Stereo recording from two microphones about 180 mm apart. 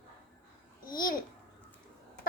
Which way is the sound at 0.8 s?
50° left (ahead or behind).